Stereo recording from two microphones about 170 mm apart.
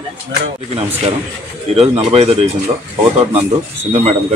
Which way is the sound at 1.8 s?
35° right (ahead or behind).